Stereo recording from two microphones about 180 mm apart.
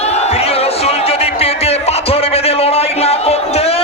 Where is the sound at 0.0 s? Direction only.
35° left (ahead or behind).